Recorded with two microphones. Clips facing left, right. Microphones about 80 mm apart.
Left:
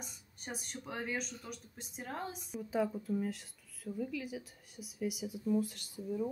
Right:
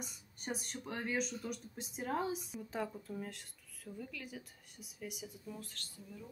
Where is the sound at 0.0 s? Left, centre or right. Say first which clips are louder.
Right 2 dB; centre.